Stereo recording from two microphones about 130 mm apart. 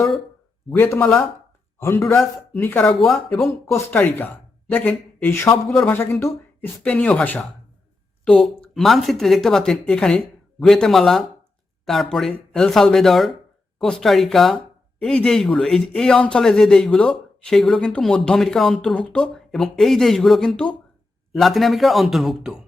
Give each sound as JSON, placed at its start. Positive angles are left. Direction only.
{"t": 0.7, "sound": "a man's voice", "side_deg": 15}